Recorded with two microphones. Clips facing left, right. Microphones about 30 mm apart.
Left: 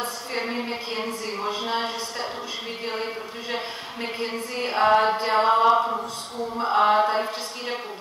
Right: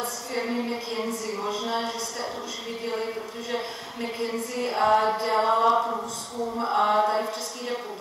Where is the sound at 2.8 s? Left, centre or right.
Left; by 6.0 s centre.